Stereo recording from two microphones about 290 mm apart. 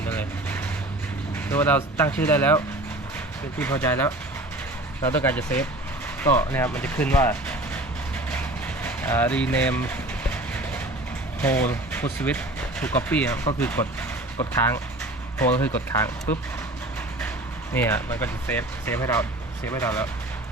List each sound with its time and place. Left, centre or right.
0.1 s vehicle: centre
1.5 s speech: centre
3.6 s speech: centre
8.3 s vehicle: centre
10.3 s train: centre
11.3 s speech: centre
15.4 s speech: centre
17.7 s speech: centre